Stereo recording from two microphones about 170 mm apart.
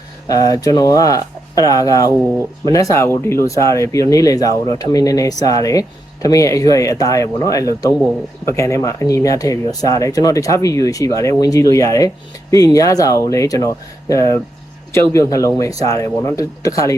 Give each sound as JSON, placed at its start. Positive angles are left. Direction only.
{"t": 0.3, "sound": "a man's voice", "side_deg": 20}